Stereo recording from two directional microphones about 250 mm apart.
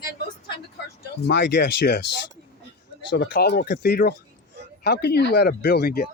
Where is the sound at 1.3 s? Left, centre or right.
Left.